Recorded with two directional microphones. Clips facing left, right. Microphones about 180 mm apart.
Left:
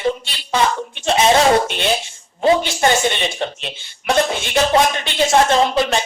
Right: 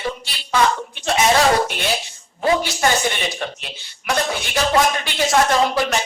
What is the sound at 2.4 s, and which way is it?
Speech, 25° left (ahead or behind).